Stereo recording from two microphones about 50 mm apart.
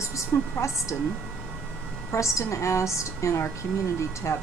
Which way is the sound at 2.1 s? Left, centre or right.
Left.